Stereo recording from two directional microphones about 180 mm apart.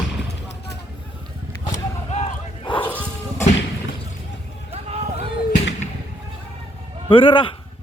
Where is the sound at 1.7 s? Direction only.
40° left (ahead or behind).